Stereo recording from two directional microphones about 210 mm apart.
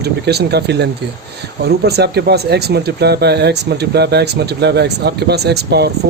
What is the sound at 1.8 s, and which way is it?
Speech, 50° right (ahead or behind).